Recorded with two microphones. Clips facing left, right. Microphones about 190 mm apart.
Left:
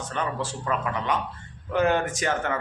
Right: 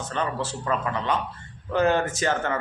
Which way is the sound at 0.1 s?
10° left (ahead or behind).